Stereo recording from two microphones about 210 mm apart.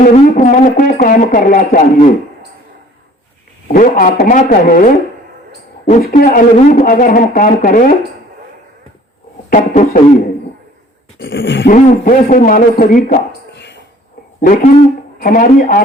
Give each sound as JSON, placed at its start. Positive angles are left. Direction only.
{"t": 0.0, "sound": "speech", "side_deg": 40}
{"t": 3.7, "sound": "speech", "side_deg": 40}
{"t": 9.5, "sound": "speech", "side_deg": 40}
{"t": 11.2, "sound": "a sound", "side_deg": 60}
{"t": 11.6, "sound": "speech", "side_deg": 40}
{"t": 13.6, "sound": "a sound", "side_deg": 55}
{"t": 14.4, "sound": "speech", "side_deg": 40}